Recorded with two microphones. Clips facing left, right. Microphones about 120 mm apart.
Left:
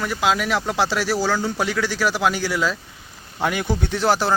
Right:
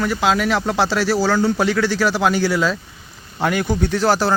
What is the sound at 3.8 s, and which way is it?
Speech, 20° left (ahead or behind).